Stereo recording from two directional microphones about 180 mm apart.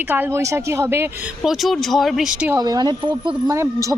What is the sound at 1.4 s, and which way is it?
Speech, centre (ahead or behind).